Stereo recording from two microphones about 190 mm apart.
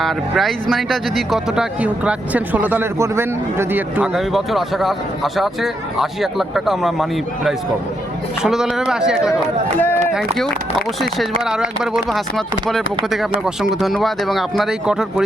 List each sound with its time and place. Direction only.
0.0 s speech: centre (ahead or behind)
13.8 s speech: centre (ahead or behind)